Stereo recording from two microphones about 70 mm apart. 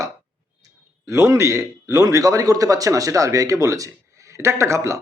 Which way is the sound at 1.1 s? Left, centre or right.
Right.